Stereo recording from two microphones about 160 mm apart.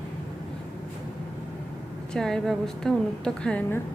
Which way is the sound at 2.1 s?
5° left (ahead or behind).